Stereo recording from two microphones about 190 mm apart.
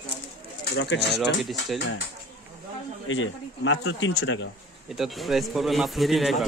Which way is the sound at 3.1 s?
90° left.